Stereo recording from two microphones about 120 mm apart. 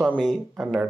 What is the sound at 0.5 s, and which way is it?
Speech, 10° right (ahead or behind).